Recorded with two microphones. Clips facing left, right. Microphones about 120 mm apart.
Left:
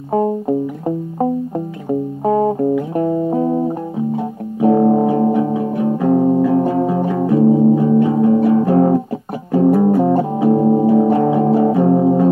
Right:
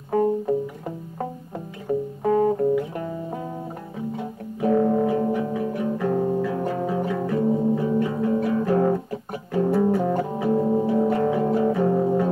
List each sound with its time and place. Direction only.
0.1 s music: 35° left (ahead or behind)